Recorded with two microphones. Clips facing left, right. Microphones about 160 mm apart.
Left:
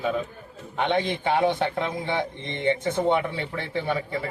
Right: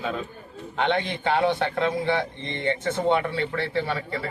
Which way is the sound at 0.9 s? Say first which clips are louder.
Left 1 dB; 15° left (ahead or behind).